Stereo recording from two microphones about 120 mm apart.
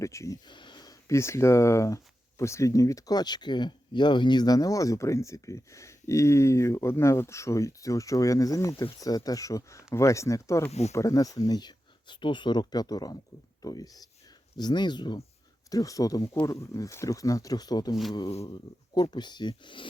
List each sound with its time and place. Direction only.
0.0 s speech: 25° left (ahead or behind)
0.4 s speech: 40° left (ahead or behind)
10.7 s speech: 65° left (ahead or behind)
10.9 s speech: 25° left (ahead or behind); by 19.9 s 45° left (ahead or behind)